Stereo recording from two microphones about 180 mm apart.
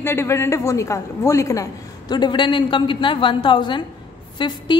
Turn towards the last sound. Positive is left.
turn(degrees=25)  # may be behind; listen again after turning